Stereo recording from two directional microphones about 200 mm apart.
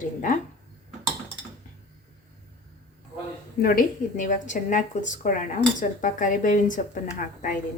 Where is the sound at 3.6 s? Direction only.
45° left (ahead or behind).